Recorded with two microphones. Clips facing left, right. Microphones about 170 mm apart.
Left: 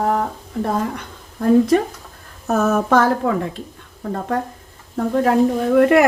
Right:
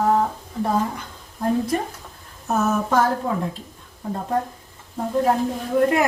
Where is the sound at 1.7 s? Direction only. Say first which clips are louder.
Left 8 dB; 80° left.